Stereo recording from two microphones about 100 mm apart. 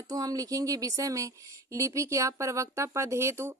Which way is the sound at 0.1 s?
35° right (ahead or behind).